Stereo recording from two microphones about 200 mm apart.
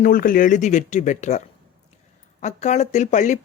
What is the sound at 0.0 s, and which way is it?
Speech, 45° left (ahead or behind).